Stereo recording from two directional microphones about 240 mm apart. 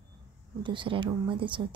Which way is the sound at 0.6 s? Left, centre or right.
Centre.